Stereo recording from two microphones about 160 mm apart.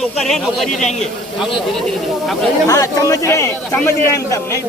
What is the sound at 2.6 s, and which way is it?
A man's voice, 20° left (ahead or behind).